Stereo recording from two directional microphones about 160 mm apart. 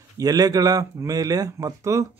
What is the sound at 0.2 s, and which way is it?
A man's voice, 25° right (ahead or behind).